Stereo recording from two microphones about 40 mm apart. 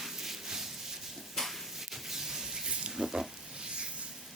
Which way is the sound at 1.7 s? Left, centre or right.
Centre.